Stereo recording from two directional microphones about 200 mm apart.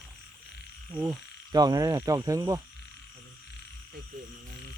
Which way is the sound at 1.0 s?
20° right (ahead or behind).